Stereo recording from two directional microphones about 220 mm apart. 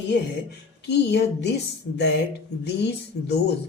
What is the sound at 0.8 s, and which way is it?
Speech, 50° left (ahead or behind).